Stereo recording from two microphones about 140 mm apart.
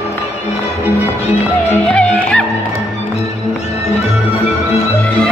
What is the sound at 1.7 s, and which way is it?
Music, 5° left (ahead or behind).